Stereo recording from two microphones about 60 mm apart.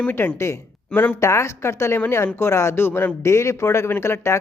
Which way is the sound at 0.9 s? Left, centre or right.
Left.